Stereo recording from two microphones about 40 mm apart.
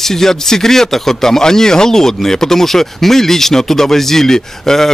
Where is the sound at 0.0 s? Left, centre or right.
Centre.